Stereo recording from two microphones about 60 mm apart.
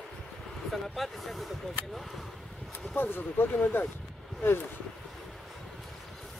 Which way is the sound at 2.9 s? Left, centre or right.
Left.